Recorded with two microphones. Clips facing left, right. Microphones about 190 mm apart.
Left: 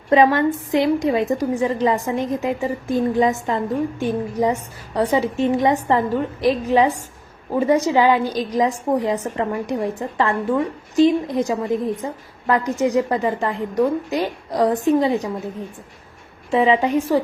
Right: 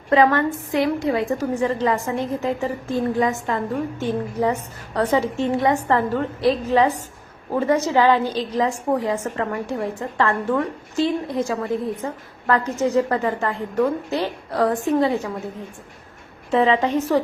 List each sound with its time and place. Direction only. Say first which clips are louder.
0.1 s a woman's voice: left 2 dB; 20° left (ahead or behind)
16.5 s a woman's voice: left 1 dB; 10° left (ahead or behind)